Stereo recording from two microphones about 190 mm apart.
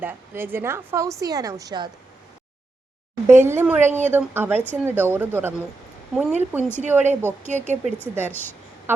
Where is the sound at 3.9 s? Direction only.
40° right (ahead or behind).